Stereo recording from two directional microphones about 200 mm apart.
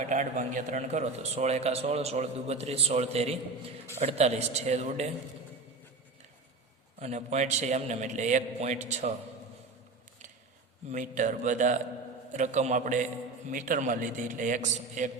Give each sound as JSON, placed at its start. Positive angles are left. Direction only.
{"t": 0.0, "sound": "a man's voice", "side_deg": -40}
{"t": 7.0, "sound": "a man's voice", "side_deg": -35}
{"t": 10.9, "sound": "a man's voice", "side_deg": -40}